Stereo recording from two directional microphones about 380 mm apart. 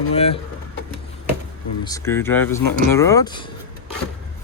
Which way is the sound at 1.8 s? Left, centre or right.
Centre.